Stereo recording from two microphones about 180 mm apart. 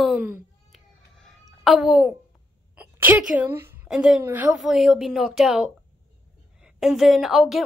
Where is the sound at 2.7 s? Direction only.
10° right (ahead or behind).